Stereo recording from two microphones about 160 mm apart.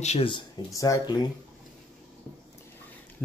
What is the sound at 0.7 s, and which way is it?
Speech, 20° left (ahead or behind).